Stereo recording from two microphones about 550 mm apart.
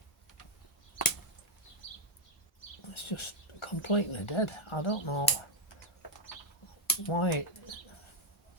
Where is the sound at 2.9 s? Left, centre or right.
Left.